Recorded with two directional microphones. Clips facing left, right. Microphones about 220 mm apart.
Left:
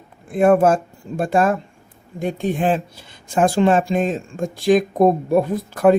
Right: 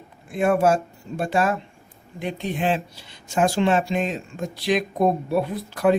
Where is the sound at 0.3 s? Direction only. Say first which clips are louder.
Left 5 dB; 50° left (ahead or behind).